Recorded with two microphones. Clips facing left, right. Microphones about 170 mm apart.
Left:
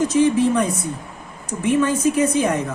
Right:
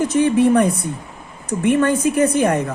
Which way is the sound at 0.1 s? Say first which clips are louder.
Right 2 dB; 60° right (ahead or behind).